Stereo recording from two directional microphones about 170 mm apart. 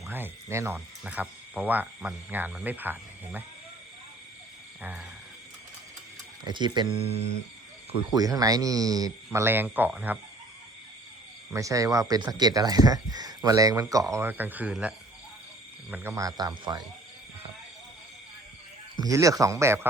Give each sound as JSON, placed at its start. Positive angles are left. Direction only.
{"t": 0.1, "sound": "speech", "side_deg": -15}
{"t": 4.8, "sound": "speech", "side_deg": -10}
{"t": 6.4, "sound": "speech", "side_deg": -25}
{"t": 8.1, "sound": "speech", "side_deg": -20}
{"t": 11.5, "sound": "speech", "side_deg": -20}
{"t": 18.9, "sound": "speech", "side_deg": -20}